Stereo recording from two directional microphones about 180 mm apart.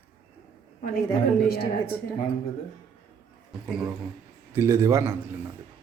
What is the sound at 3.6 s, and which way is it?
Speech, centre (ahead or behind).